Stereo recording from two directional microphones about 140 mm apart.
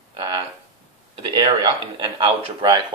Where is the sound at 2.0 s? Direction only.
35° right (ahead or behind).